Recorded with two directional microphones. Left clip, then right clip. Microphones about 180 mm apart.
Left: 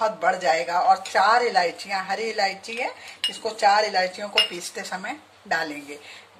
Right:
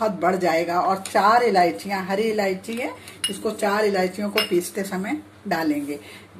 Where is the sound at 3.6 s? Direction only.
45° left (ahead or behind).